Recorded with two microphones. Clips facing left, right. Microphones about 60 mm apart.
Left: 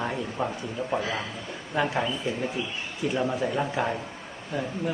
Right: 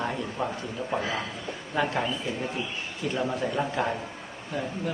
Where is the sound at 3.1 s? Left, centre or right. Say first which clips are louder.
Left 1 dB; centre.